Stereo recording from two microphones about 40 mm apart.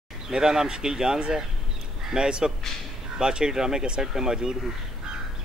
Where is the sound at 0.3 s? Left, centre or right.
Centre.